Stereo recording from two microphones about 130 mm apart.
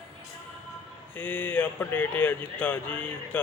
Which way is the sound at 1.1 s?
10° left (ahead or behind).